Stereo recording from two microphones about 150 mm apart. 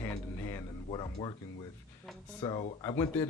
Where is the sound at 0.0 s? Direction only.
20° left (ahead or behind).